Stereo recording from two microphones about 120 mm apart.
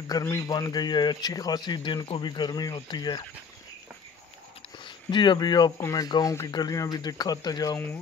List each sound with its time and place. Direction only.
0.1 s speech: 25° left (ahead or behind)
4.7 s speech: 40° left (ahead or behind)
5.8 s speech: 25° left (ahead or behind)
6.0 s speech: 35° left (ahead or behind)